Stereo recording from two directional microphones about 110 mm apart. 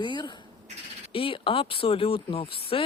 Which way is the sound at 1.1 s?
55° left (ahead or behind).